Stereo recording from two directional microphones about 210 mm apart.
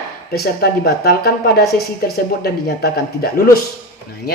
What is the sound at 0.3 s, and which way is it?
Speech, 45° left (ahead or behind).